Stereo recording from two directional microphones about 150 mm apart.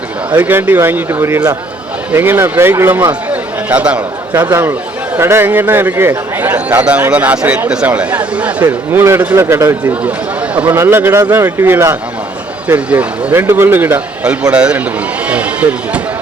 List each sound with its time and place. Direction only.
0.3 s a man's voice: 10° right (ahead or behind)